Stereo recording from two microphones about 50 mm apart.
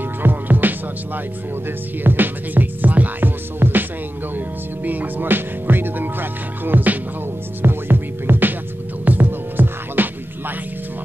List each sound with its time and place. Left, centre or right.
0.2 s music: right
4.8 s music: right